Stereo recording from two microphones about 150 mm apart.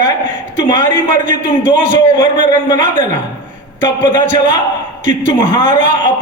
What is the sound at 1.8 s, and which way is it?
A man's voice, 30° left (ahead or behind).